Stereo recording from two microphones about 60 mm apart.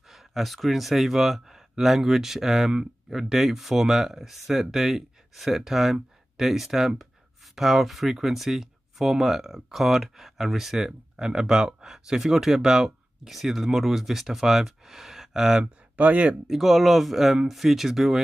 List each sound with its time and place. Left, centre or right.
0.1 s speech: centre
15.6 s speech: right
16.4 s speech: centre